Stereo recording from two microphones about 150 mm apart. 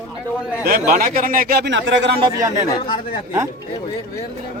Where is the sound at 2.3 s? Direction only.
20° right (ahead or behind).